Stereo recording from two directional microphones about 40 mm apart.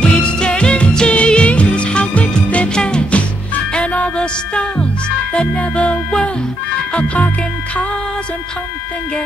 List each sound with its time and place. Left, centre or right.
0.0 s music: left